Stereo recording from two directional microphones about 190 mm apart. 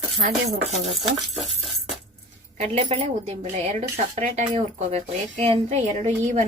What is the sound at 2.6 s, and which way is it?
A woman's voice, 35° right (ahead or behind).